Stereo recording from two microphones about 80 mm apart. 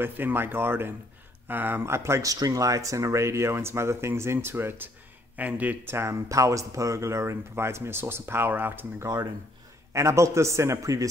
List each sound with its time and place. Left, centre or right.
0.0 s speech: right
2.2 s speech: right
9.0 s speech: right
9.9 s speech: right